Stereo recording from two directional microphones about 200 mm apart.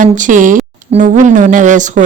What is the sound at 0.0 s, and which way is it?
A woman's voice, 40° right (ahead or behind).